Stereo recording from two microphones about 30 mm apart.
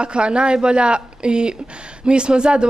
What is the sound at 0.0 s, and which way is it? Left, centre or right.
Speech, right.